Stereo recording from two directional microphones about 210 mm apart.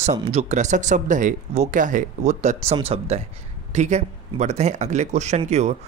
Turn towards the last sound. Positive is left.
turn(degrees=-30)  # may be behind; listen again after turning